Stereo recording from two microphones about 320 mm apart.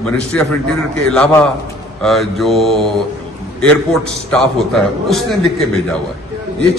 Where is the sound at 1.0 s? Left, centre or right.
Centre.